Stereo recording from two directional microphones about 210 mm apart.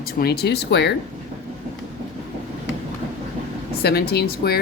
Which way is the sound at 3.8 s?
50° left (ahead or behind).